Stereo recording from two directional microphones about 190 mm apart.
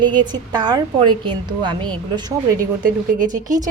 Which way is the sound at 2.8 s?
45° right (ahead or behind).